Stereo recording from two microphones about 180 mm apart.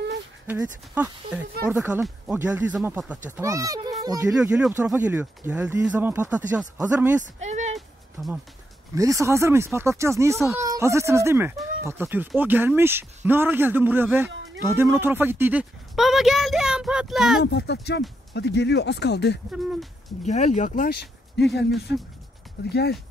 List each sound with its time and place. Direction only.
0.5 s speech: 15° right (ahead or behind)
4.4 s speech: 5° right (ahead or behind)
7.3 s a sound: 40° right (ahead or behind)
7.7 s music: centre (ahead or behind)
8.9 s speech: 15° right (ahead or behind)
14.3 s music: 90° right
14.6 s speech: 15° right (ahead or behind)
17.4 s speech: 70° left (ahead or behind)
19.5 s speech: 5° right (ahead or behind)
20.2 s speech: 40° left (ahead or behind); by 22.9 s 60° left (ahead or behind)